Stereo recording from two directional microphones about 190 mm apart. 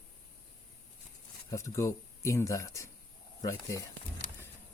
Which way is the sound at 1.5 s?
15° left (ahead or behind).